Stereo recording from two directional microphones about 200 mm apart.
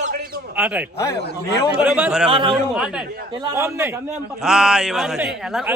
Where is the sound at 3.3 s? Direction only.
20° right (ahead or behind).